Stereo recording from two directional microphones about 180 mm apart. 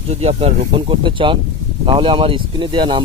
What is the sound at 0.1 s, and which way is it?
Speech, 35° right (ahead or behind).